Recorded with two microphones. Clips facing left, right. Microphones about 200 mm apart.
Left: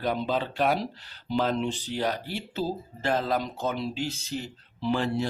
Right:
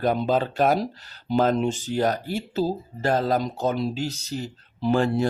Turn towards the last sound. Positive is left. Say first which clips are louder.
# right 5 dB
turn(degrees=-50)  # may be behind; listen again after turning